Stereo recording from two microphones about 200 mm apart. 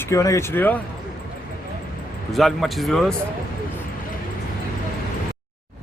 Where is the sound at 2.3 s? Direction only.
Centre (ahead or behind).